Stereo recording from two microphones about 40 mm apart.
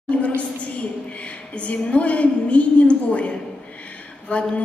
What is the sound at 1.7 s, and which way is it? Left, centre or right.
A woman's voice, left.